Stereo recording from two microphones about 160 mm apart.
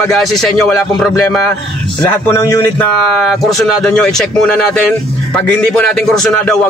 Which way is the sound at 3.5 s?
5° left (ahead or behind).